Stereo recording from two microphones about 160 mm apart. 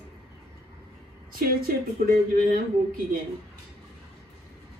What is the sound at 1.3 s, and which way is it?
Speech, 65° right (ahead or behind).